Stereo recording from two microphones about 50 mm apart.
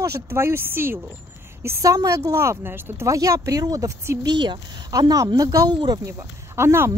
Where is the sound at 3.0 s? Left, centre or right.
Right.